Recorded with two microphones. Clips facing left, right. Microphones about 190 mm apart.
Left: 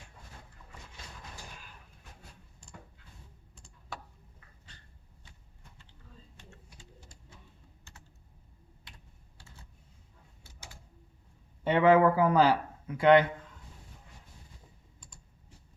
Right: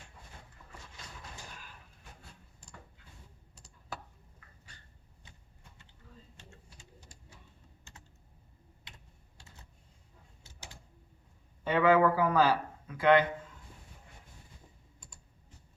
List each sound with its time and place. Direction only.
0.6 s a sound: centre (ahead or behind)
3.5 s computer keyboard: centre (ahead or behind)
11.6 s speech: 25° left (ahead or behind)